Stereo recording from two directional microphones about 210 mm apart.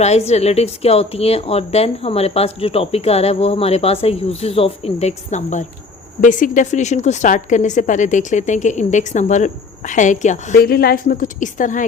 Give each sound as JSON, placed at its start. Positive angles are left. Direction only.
{"t": 0.0, "sound": "a woman's voice", "side_deg": 30}